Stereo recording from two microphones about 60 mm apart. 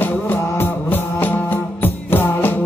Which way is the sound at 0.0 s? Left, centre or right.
Left.